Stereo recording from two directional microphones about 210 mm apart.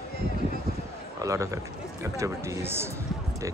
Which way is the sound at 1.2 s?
15° right (ahead or behind).